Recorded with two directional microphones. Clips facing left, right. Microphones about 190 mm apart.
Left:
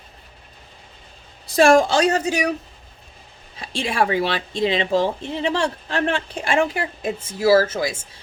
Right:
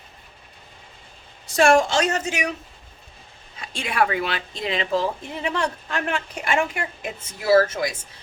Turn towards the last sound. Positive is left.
turn(degrees=30)  # may be behind; listen again after turning